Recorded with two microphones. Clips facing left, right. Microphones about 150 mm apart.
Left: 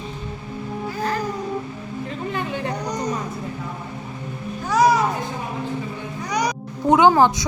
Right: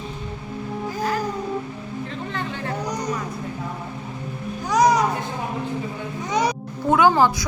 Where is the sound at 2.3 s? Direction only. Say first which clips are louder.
Left 4 dB; 10° left (ahead or behind).